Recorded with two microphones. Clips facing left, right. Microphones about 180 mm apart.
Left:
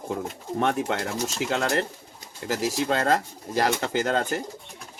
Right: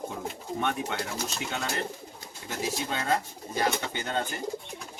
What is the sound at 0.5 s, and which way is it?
Speech, 70° left (ahead or behind).